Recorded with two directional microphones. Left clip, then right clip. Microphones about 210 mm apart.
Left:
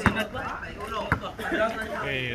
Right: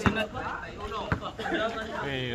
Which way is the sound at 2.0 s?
30° right (ahead or behind).